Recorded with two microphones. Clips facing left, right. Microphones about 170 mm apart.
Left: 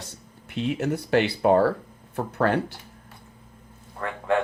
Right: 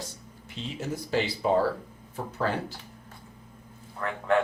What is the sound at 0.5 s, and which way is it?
Speech, 65° left (ahead or behind).